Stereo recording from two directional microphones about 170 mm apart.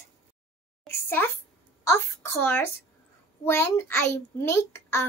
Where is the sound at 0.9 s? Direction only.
15° left (ahead or behind).